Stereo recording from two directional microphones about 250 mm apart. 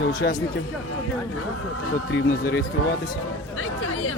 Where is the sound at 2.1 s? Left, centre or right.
Left.